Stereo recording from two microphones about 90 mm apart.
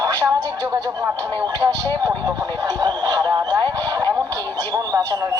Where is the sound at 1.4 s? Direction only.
45° right (ahead or behind).